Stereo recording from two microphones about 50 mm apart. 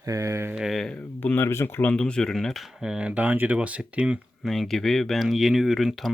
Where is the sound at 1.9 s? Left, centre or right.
Centre.